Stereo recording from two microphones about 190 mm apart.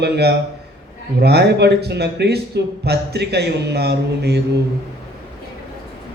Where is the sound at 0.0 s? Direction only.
60° right (ahead or behind).